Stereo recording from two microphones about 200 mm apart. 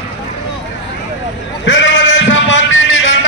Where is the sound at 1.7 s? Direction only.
65° left (ahead or behind).